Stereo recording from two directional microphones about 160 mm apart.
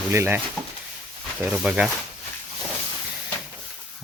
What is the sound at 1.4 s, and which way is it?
Speech, 5° right (ahead or behind).